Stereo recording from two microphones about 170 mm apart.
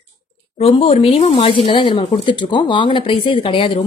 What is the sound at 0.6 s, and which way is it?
A woman's voice, 35° left (ahead or behind).